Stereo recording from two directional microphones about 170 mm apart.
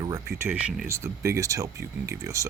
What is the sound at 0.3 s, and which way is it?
Speech, 15° right (ahead or behind).